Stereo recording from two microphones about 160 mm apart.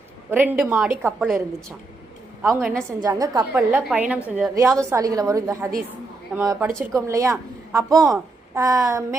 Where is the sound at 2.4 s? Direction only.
15° right (ahead or behind).